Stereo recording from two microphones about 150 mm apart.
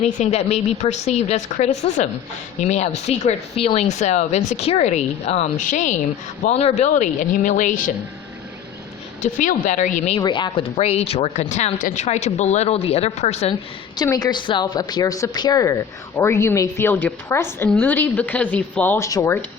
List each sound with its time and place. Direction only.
0.0 s speech: 45° left (ahead or behind)
9.2 s speech: 55° left (ahead or behind)
10.2 s speech: 30° left (ahead or behind)
10.8 s speech: 45° left (ahead or behind)
13.9 s a woman's voice: 25° left (ahead or behind)